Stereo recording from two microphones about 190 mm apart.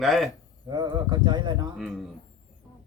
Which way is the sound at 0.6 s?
25° right (ahead or behind).